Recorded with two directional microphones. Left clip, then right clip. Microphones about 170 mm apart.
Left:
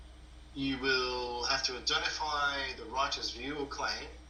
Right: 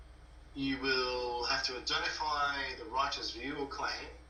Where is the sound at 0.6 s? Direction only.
20° left (ahead or behind).